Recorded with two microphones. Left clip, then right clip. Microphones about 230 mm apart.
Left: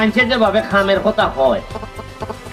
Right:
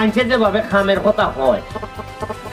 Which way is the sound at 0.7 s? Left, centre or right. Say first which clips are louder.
Left 1 dB; left.